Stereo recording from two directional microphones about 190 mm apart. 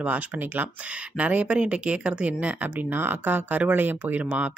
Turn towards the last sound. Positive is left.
turn(degrees=-5)  # may be behind; listen again after turning